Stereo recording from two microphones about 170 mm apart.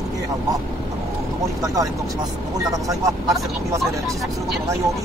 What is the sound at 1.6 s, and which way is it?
Speech, 20° right (ahead or behind).